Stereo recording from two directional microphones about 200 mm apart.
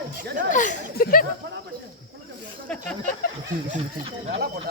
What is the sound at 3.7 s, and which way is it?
Speech, 40° right (ahead or behind).